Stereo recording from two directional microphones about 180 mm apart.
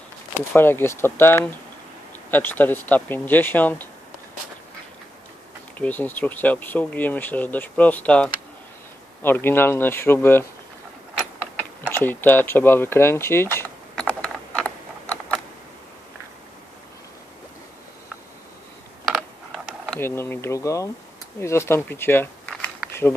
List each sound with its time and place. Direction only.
0.5 s speech: 10° left (ahead or behind)
5.8 s speech: 10° left (ahead or behind)
11.9 s mechanisms: 10° left (ahead or behind)
19.9 s speech: 15° left (ahead or behind)